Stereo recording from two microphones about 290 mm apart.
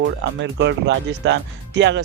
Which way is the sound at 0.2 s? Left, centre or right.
Right.